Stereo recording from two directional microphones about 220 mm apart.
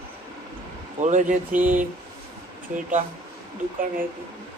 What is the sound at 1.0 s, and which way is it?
Speech, 35° right (ahead or behind).